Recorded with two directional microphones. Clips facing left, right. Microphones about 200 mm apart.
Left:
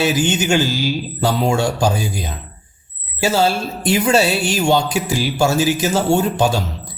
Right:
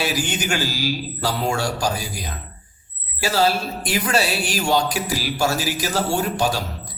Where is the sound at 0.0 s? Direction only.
25° left (ahead or behind).